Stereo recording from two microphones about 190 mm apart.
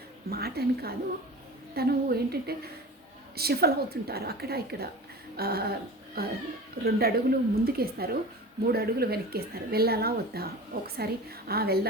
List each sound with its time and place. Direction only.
0.3 s a woman's voice: 55° right (ahead or behind)